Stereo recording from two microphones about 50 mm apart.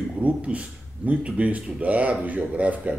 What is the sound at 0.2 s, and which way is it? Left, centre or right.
Speech, right.